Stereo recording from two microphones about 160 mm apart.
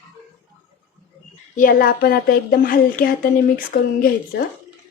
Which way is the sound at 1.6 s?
60° left (ahead or behind).